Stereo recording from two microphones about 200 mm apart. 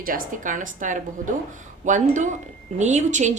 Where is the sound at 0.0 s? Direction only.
45° right (ahead or behind).